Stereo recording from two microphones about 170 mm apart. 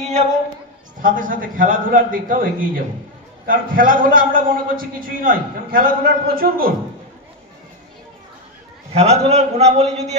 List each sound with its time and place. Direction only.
0.9 s a man's voice: 55° right (ahead or behind)
8.9 s a man's voice: 35° right (ahead or behind)